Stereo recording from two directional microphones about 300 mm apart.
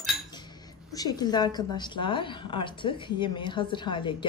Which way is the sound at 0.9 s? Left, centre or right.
Centre.